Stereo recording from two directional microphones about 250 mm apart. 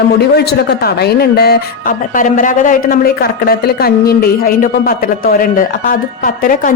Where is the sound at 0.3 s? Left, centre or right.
Left.